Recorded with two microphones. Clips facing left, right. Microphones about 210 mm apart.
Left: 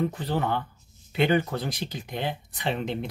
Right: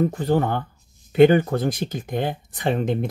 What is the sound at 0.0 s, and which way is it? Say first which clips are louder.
Speech: right 7 dB; 45° right (ahead or behind).